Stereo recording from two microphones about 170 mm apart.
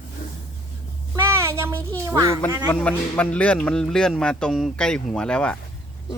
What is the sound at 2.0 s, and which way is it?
Speech, 20° right (ahead or behind).